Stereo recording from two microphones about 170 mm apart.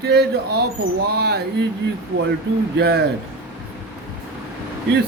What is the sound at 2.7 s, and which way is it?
Speech, 70° right (ahead or behind).